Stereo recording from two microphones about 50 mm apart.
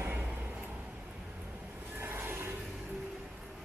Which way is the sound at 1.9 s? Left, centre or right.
Right.